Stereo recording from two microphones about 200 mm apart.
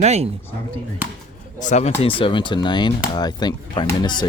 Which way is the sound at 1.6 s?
35° left (ahead or behind).